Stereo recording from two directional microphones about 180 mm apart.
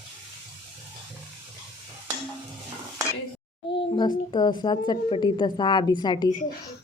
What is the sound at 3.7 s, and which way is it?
A child's voice, 25° left (ahead or behind).